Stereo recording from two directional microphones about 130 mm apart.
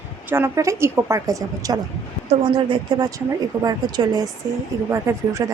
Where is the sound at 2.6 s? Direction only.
40° right (ahead or behind).